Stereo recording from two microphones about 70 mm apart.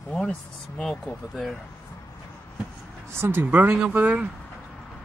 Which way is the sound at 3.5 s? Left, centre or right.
Right.